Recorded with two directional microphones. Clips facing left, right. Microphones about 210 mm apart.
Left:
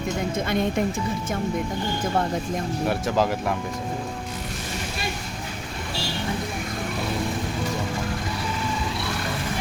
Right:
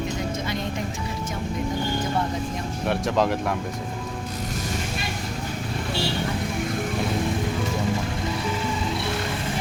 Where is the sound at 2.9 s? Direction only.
Centre (ahead or behind).